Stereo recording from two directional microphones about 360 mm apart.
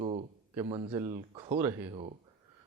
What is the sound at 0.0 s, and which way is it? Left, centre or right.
Speech, centre.